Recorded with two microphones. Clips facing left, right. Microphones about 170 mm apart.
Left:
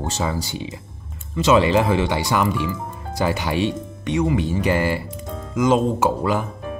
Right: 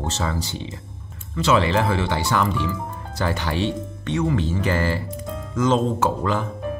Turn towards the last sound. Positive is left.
turn(degrees=10)  # may be behind; listen again after turning